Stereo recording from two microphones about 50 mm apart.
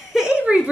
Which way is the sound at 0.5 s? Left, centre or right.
Right.